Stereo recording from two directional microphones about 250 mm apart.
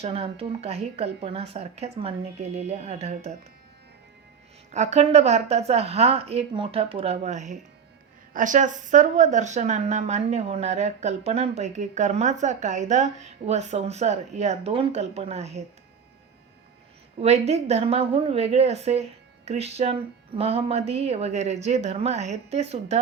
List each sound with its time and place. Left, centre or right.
0.0 s speech: right
4.7 s speech: right
17.2 s speech: right